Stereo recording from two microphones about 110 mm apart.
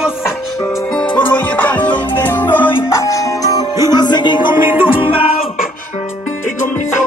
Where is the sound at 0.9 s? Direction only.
10° left (ahead or behind); by 3.6 s 30° left (ahead or behind).